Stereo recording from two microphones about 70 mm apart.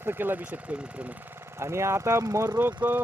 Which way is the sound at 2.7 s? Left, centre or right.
Right.